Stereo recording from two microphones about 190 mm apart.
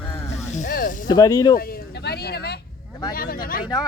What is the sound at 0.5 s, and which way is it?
Snake, 45° left (ahead or behind).